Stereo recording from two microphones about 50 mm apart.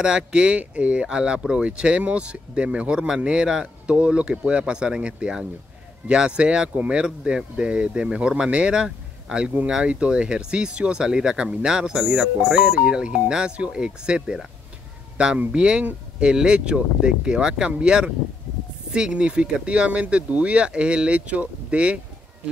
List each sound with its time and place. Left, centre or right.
0.0 s speech: centre
8.8 s a sound: centre
9.7 s speech: centre